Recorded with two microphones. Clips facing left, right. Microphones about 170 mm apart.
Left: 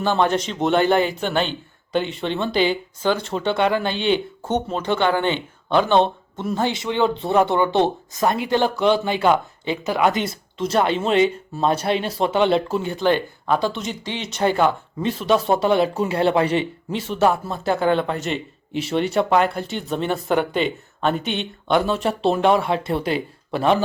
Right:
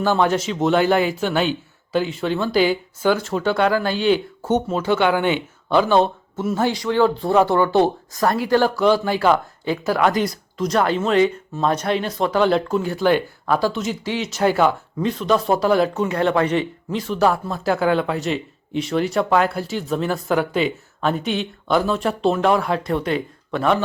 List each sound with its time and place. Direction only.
0.0 s speech: 5° right (ahead or behind)
6.7 s speech: 20° left (ahead or behind)
12.8 s speech: 5° right (ahead or behind)
15.6 s speech: 25° left (ahead or behind)
17.1 s speech: centre (ahead or behind)
22.2 s speech: 30° left (ahead or behind)